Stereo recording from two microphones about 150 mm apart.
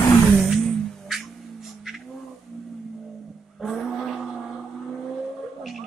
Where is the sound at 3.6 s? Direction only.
Centre (ahead or behind).